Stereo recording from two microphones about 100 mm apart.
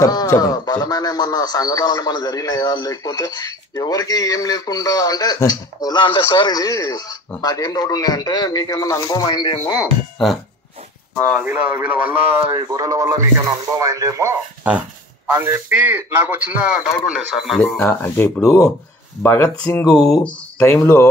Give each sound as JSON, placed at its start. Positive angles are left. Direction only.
{"t": 0.0, "sound": "a sound", "side_deg": 40}
{"t": 0.4, "sound": "speech", "side_deg": 40}
{"t": 10.1, "sound": "speech", "side_deg": 0}
{"t": 11.3, "sound": "speech", "side_deg": -15}
{"t": 12.5, "sound": "speech", "side_deg": -40}
{"t": 15.3, "sound": "speech", "side_deg": -25}
{"t": 16.6, "sound": "speech", "side_deg": -10}
{"t": 17.7, "sound": "speech", "side_deg": 20}
{"t": 20.6, "sound": "speech", "side_deg": 25}